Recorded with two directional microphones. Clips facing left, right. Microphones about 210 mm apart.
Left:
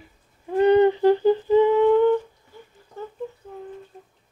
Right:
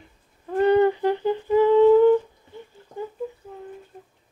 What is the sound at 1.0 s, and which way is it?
Humming, 35° left (ahead or behind).